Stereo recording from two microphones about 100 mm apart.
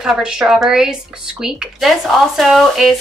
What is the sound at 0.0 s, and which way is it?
A woman's voice, 5° right (ahead or behind).